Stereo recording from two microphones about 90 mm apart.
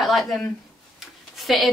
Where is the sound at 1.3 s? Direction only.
Centre (ahead or behind).